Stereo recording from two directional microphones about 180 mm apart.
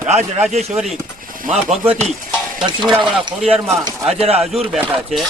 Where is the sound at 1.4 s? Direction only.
35° right (ahead or behind).